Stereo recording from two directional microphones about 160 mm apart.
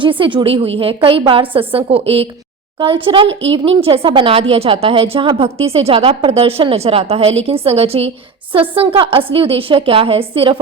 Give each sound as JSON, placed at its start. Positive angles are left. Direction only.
{"t": 0.0, "sound": "speech", "side_deg": -30}